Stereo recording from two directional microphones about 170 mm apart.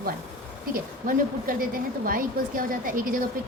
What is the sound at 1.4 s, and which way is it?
A woman's voice, 55° right (ahead or behind).